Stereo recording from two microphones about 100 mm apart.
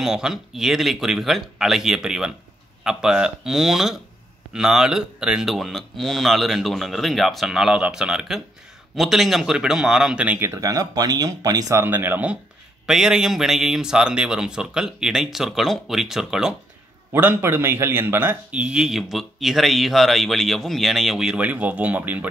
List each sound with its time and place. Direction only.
0.0 s speech: 5° right (ahead or behind)
10.4 s speech: 30° right (ahead or behind)
11.8 s a man's voice: 20° right (ahead or behind)
12.8 s speech: 5° right (ahead or behind)
17.1 s a man's voice: 20° right (ahead or behind)
18.5 s speech: 10° right (ahead or behind)